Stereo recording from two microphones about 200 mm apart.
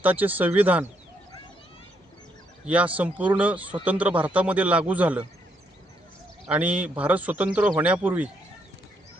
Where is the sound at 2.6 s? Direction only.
5° right (ahead or behind).